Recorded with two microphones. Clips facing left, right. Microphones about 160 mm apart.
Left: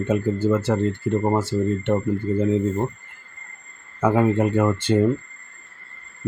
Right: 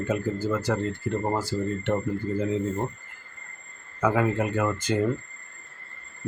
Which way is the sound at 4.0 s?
25° left (ahead or behind).